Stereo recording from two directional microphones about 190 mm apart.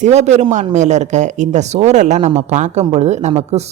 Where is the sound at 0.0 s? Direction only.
35° right (ahead or behind).